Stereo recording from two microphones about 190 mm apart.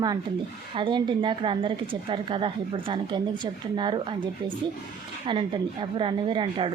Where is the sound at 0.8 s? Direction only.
25° right (ahead or behind).